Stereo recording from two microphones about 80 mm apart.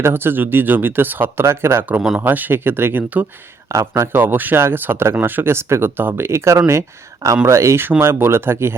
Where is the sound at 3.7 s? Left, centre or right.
Right.